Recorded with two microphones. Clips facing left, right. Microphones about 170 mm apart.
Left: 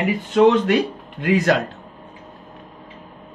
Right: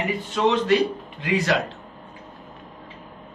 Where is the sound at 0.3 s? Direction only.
55° left (ahead or behind).